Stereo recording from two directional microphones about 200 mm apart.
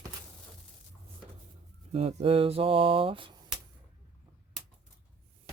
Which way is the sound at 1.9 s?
30° right (ahead or behind).